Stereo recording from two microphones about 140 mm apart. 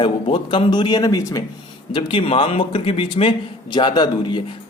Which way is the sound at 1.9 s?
40° left (ahead or behind).